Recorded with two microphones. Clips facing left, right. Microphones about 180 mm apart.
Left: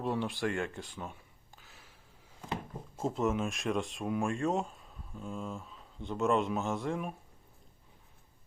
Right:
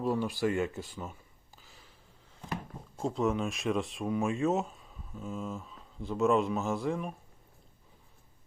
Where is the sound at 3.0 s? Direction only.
Centre (ahead or behind).